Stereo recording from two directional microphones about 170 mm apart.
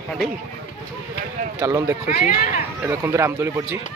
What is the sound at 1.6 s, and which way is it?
Speech, 20° right (ahead or behind).